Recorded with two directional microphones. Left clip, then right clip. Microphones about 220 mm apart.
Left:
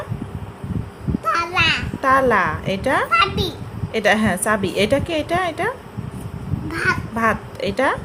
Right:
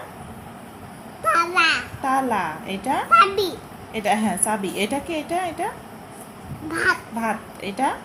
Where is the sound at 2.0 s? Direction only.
40° left (ahead or behind).